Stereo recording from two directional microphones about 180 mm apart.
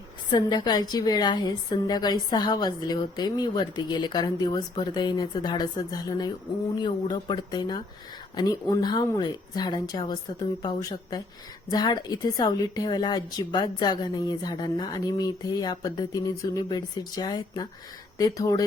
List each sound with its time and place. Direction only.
0.3 s a woman's voice: 25° left (ahead or behind)